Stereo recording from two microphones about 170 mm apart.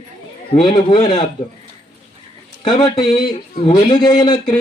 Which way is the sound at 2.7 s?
25° left (ahead or behind).